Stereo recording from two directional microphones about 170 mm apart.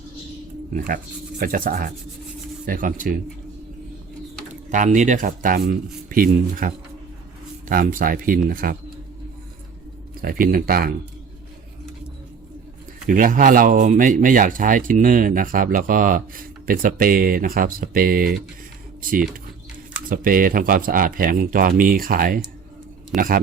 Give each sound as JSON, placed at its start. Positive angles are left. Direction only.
{"t": 0.7, "sound": "speech", "side_deg": -60}
{"t": 4.7, "sound": "speech", "side_deg": -50}
{"t": 10.2, "sound": "speech", "side_deg": -55}
{"t": 13.1, "sound": "speech", "side_deg": -55}
{"t": 20.1, "sound": "speech", "side_deg": -55}